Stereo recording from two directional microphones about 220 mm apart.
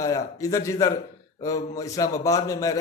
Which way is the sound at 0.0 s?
15° left (ahead or behind).